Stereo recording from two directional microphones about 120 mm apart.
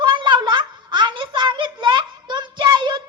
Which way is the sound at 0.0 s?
40° right (ahead or behind).